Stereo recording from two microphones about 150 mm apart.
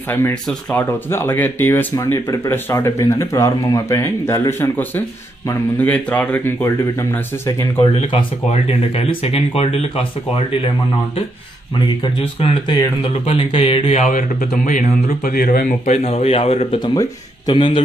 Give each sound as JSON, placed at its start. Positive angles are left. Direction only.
{"t": 0.1, "sound": "speech", "side_deg": 15}
{"t": 8.0, "sound": "speech", "side_deg": 45}
{"t": 12.0, "sound": "speech", "side_deg": 40}
{"t": 14.0, "sound": "speech", "side_deg": 65}
{"t": 16.0, "sound": "speech", "side_deg": 45}
{"t": 16.8, "sound": "speech", "side_deg": 30}